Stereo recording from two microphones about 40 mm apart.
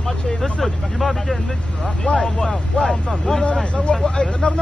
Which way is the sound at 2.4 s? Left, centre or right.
Centre.